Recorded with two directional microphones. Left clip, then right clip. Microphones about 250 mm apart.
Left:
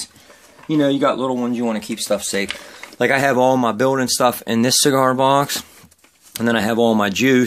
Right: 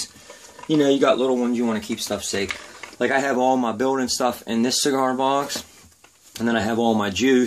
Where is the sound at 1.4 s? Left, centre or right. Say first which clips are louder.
Left 1 dB; left.